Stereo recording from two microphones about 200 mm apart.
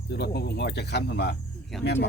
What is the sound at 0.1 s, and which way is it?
Speech, 55° left (ahead or behind).